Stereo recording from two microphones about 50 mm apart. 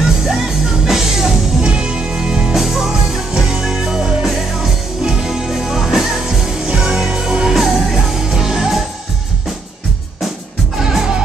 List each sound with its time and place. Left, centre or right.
0.8 s music: centre
10.8 s music: centre